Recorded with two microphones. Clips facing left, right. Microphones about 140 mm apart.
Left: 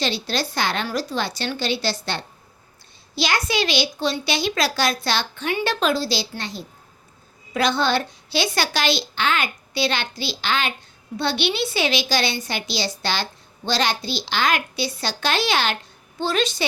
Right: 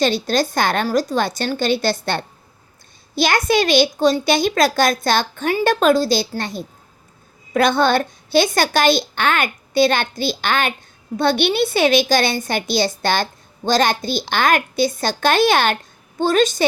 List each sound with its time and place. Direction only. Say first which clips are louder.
0.0 s a woman's voice: right 7 dB; 45° right (ahead or behind)